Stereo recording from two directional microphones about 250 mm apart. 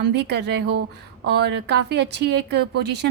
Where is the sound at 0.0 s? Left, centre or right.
Right.